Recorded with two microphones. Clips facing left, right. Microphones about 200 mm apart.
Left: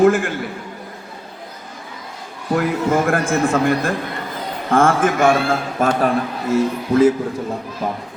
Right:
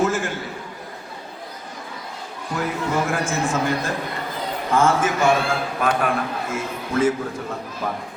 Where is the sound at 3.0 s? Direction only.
55° left (ahead or behind).